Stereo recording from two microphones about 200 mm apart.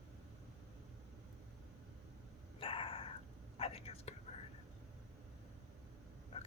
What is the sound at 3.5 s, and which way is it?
Whispering, 30° left (ahead or behind).